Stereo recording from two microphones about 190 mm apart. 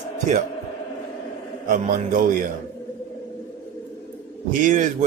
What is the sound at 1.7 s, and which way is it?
Speech, 45° right (ahead or behind).